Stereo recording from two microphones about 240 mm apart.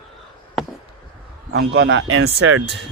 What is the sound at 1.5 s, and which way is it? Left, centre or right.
Speech, right.